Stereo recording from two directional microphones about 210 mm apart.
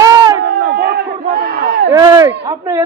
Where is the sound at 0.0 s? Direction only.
20° right (ahead or behind).